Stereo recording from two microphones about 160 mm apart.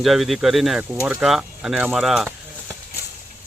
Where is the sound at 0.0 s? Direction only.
Centre (ahead or behind).